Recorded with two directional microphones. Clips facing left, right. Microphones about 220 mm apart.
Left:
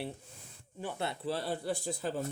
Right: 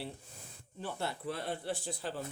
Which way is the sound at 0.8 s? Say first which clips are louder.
Left 2 dB; 15° left (ahead or behind).